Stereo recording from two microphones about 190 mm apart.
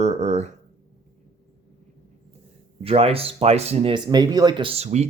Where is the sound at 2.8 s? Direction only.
30° right (ahead or behind).